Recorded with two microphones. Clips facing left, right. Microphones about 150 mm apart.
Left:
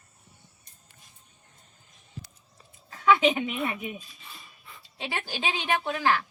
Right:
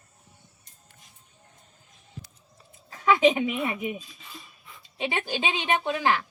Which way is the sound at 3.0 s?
35° right (ahead or behind).